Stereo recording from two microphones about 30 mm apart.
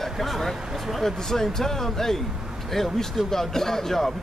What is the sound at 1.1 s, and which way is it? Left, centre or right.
Speech, centre.